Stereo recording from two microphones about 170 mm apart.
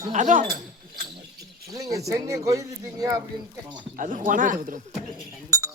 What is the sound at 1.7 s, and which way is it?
Speech, 20° right (ahead or behind).